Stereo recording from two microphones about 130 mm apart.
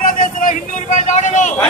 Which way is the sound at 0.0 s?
90° left.